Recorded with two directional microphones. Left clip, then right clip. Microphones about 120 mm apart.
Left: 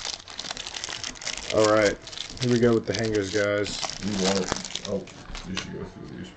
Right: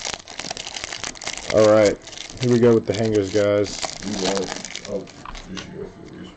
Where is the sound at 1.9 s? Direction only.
30° right (ahead or behind).